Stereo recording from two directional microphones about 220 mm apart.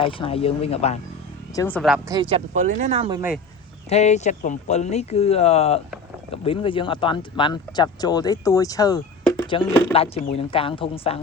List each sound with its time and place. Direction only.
0.0 s speech: 25° left (ahead or behind)
1.5 s speech: 5° left (ahead or behind)
2.0 s speech: 15° right (ahead or behind)
2.3 s speech: 35° right (ahead or behind)
3.8 s speech: 30° left (ahead or behind)
9.4 s music: 20° left (ahead or behind)
9.9 s speech: 25° left (ahead or behind)